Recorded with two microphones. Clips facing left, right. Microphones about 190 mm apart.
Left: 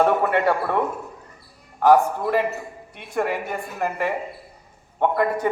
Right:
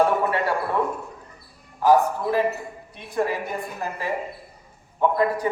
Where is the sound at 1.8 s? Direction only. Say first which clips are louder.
Left 2 dB; 60° left (ahead or behind).